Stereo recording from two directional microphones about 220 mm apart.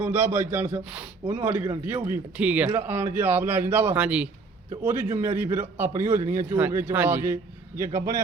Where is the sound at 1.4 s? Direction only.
5° right (ahead or behind).